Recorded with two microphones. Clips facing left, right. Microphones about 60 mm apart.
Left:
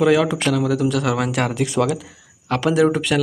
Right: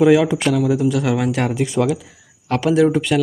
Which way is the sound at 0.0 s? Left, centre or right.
Centre.